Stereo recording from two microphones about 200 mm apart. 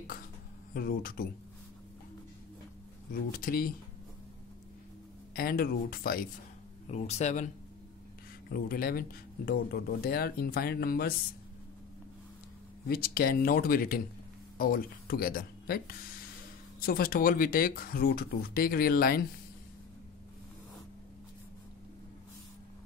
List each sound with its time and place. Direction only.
0.7 s speech: 45° left (ahead or behind)
3.1 s speech: 45° left (ahead or behind)
5.3 s speech: 50° left (ahead or behind)
6.9 s speech: 35° left (ahead or behind)
8.5 s speech: 50° left (ahead or behind)
12.8 s speech: 50° left (ahead or behind)